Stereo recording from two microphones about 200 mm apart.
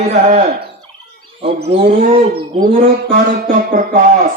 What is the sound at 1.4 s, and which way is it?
Speech, 30° right (ahead or behind).